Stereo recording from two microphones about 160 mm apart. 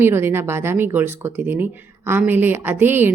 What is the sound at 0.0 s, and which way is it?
Speech, 15° right (ahead or behind).